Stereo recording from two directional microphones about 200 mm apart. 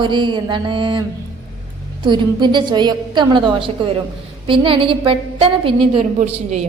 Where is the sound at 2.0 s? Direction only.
25° right (ahead or behind).